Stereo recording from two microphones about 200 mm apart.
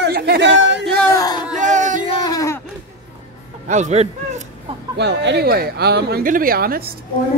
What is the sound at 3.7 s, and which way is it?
Speech, 35° right (ahead or behind).